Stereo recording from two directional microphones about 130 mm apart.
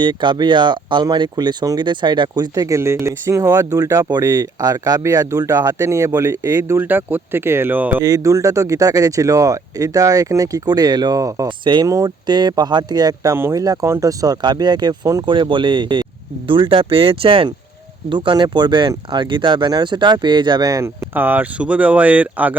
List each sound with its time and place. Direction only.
0.0 s speech: 35° right (ahead or behind); by 8.0 s 15° right (ahead or behind)
8.0 s speech: 25° right (ahead or behind)
11.4 s speech: 35° right (ahead or behind)
21.1 s speech: 15° right (ahead or behind)